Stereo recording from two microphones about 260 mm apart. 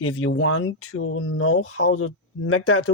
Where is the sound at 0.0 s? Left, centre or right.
Left.